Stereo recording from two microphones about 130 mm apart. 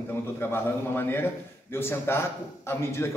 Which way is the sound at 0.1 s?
20° left (ahead or behind).